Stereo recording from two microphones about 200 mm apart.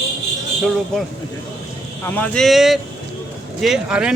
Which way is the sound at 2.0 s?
10° left (ahead or behind).